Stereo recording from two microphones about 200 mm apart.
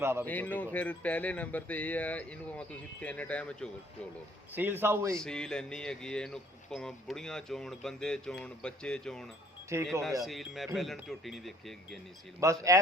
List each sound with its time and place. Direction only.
0.0 s a man's voice: 10° right (ahead or behind)
0.3 s speech: 10° left (ahead or behind)
4.5 s a man's voice: 10° right (ahead or behind)
5.1 s speech: 5° left (ahead or behind)
9.7 s a man's voice: 15° right (ahead or behind)
10.8 s speech: centre (ahead or behind)
12.4 s a man's voice: 15° right (ahead or behind)